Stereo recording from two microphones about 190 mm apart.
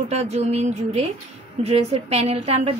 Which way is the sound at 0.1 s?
35° right (ahead or behind).